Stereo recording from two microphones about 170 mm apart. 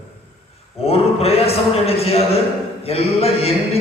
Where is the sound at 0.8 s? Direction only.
35° left (ahead or behind).